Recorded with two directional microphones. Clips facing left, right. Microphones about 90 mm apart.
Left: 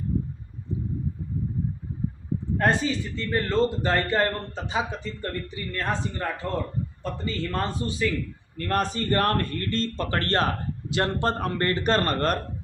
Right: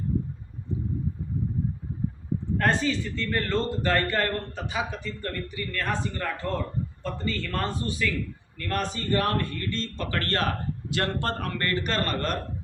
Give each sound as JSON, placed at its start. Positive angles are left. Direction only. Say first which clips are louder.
{"t": 2.6, "sound": "a man's voice", "louder": "left 1 dB", "side_deg": 15}
{"t": 8.5, "sound": "speech", "louder": "left 4 dB", "side_deg": 40}
{"t": 10.8, "sound": "a man's voice", "louder": "left 4 dB", "side_deg": 20}